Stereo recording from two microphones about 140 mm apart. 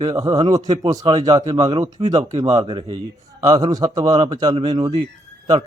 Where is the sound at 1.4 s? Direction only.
40° right (ahead or behind).